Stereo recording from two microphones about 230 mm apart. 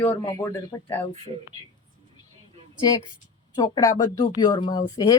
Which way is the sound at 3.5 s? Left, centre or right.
Centre.